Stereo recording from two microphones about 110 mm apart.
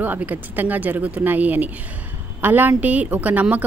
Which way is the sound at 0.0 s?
15° right (ahead or behind).